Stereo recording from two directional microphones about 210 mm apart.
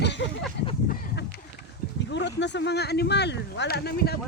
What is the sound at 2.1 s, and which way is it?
Speech, 55° left (ahead or behind).